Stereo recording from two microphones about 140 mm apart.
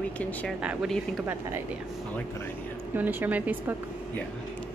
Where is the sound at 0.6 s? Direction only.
5° right (ahead or behind).